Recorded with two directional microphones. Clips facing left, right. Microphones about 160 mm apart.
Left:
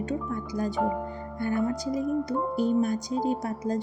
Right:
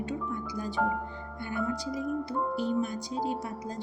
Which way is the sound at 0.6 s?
45° left (ahead or behind).